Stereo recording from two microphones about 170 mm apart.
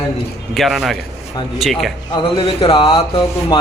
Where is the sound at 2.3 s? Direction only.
30° left (ahead or behind).